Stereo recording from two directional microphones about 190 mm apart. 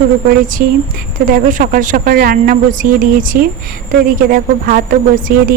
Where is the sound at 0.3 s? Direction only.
45° right (ahead or behind).